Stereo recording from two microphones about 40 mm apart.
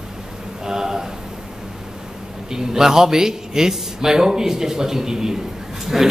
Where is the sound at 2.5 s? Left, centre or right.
Centre.